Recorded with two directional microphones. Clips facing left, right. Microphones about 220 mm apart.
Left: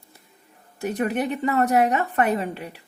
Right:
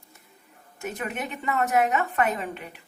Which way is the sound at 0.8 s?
35° left (ahead or behind).